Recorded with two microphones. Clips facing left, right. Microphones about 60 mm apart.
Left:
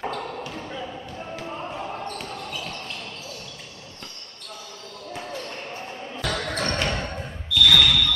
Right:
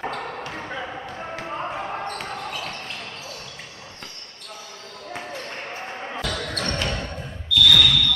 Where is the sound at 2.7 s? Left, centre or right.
Right.